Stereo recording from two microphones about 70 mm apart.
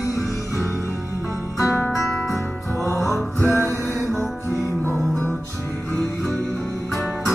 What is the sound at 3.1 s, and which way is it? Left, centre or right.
Music, left.